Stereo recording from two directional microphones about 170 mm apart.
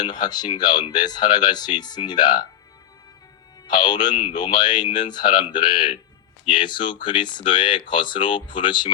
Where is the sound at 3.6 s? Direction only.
25° left (ahead or behind).